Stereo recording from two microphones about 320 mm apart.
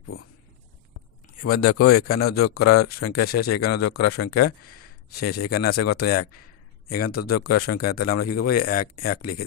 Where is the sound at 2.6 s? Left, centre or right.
Left.